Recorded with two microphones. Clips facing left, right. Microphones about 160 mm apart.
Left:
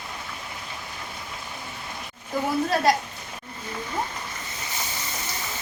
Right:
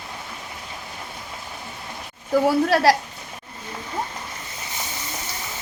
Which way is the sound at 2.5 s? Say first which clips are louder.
Right 3 dB; 80° right.